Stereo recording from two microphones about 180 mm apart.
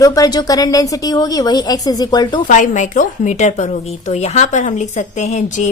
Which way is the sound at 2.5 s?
45° left (ahead or behind).